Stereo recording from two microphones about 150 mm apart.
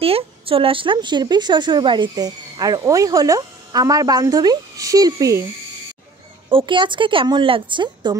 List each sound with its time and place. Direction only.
0.0 s a woman's voice: 40° right (ahead or behind); by 5.4 s 25° right (ahead or behind)
6.5 s a woman's voice: 35° right (ahead or behind)